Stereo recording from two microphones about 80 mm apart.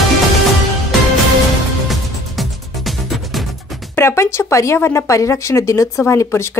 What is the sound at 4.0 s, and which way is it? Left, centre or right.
Music, left.